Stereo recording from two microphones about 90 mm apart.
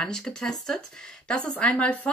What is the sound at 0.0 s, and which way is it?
Speech, 10° left (ahead or behind).